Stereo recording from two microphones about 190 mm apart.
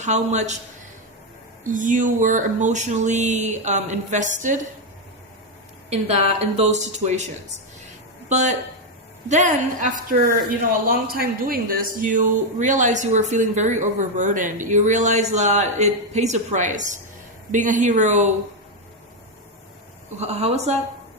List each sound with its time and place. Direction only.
0.0 s a woman's voice: 40° right (ahead or behind)
1.6 s a woman's voice: 45° right (ahead or behind)
5.9 s a woman's voice: 35° right (ahead or behind)
20.1 s a woman's voice: 35° right (ahead or behind)